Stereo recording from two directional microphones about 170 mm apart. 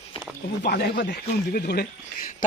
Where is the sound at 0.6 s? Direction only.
65° left (ahead or behind).